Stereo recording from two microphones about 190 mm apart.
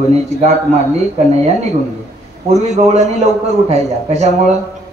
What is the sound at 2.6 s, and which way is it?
A man's voice, 35° right (ahead or behind).